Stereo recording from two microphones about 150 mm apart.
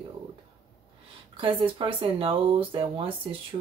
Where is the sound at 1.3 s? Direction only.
35° right (ahead or behind).